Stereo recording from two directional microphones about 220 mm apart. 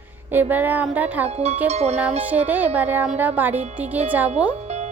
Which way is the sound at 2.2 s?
5° right (ahead or behind).